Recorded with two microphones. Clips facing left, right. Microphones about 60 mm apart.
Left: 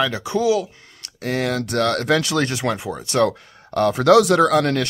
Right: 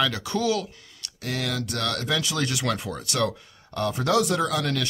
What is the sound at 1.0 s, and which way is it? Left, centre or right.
Speech, left.